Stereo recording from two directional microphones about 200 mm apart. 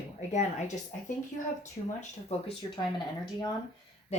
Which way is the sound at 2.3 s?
30° left (ahead or behind).